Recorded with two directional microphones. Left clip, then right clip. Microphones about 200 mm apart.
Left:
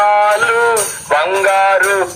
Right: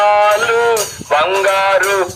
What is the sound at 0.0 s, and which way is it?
Music, centre (ahead or behind).